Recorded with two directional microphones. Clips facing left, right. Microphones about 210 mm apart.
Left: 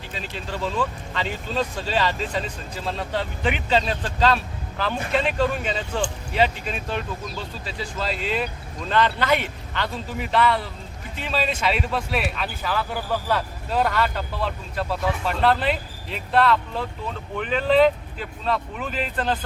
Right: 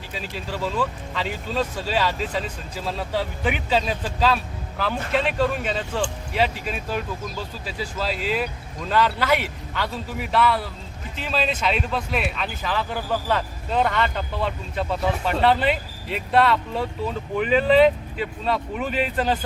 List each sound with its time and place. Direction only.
0.1 s speech: 5° right (ahead or behind)